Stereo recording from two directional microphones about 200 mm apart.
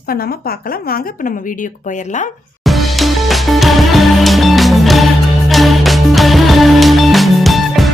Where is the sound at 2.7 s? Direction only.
Centre (ahead or behind).